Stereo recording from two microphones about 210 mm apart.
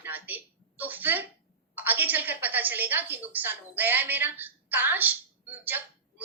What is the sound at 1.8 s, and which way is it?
A woman's voice, 10° right (ahead or behind).